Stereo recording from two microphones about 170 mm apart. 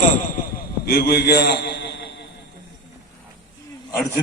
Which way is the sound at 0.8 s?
70° left (ahead or behind).